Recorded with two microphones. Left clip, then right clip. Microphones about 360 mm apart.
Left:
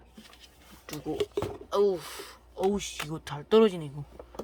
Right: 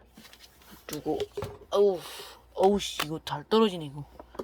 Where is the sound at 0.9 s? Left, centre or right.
Centre.